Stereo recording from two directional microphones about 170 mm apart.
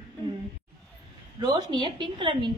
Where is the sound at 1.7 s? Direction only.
25° right (ahead or behind).